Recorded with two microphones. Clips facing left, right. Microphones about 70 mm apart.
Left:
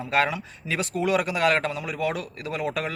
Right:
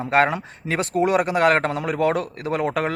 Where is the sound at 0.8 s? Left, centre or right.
Right.